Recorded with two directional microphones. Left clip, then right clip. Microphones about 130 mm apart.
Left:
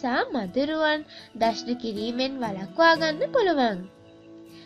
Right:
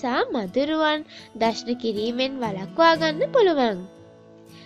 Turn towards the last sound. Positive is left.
turn(degrees=-55)  # may be behind; listen again after turning